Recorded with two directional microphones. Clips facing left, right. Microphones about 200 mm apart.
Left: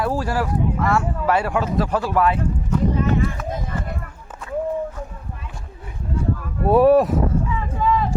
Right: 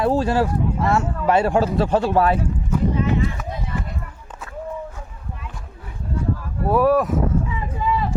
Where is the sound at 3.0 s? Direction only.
45° left (ahead or behind).